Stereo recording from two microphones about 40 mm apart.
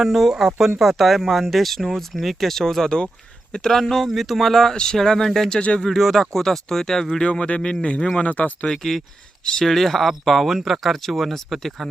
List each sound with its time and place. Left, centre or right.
0.0 s speech: centre
4.7 s speech: centre
5.5 s speech: left
5.8 s speech: centre
7.3 s speech: left
7.6 s speech: left
8.2 s speech: left
8.7 s speech: centre
9.4 s speech: centre
9.6 s speech: centre